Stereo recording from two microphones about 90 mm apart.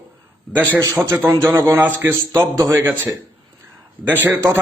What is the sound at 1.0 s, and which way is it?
A man's voice, 25° right (ahead or behind).